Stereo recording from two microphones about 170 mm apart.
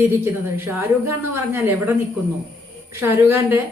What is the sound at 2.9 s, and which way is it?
Speech, 15° right (ahead or behind).